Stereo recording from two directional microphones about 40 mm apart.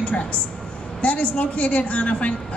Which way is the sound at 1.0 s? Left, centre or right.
Left.